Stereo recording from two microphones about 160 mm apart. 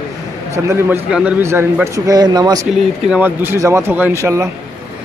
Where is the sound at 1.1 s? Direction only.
10° right (ahead or behind).